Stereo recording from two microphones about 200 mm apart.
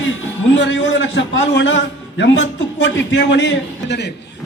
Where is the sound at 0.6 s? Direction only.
65° left (ahead or behind).